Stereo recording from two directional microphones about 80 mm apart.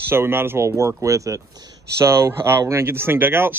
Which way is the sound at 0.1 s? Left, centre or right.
Right.